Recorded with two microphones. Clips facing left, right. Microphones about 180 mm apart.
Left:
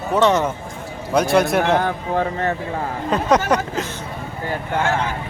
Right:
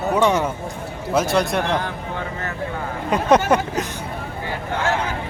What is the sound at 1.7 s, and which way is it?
Speech, 45° left (ahead or behind).